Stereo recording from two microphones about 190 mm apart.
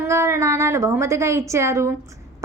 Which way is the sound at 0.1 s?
15° right (ahead or behind).